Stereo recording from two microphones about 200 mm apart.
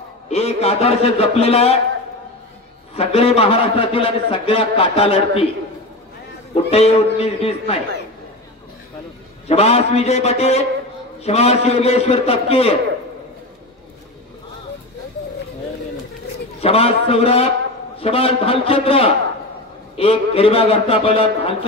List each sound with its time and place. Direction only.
0.3 s a man's voice: 30° left (ahead or behind)
3.0 s a man's voice: 30° left (ahead or behind)
6.5 s a man's voice: 30° left (ahead or behind)
9.5 s a man's voice: 30° left (ahead or behind)
16.6 s a man's voice: 30° left (ahead or behind)